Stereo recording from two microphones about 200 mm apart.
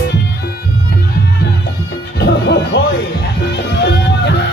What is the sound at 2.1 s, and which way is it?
Music, 55° left (ahead or behind).